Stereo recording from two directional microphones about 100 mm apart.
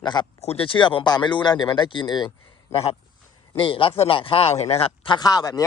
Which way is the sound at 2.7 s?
70° left (ahead or behind).